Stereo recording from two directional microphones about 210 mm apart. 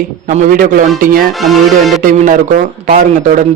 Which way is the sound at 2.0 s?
40° right (ahead or behind).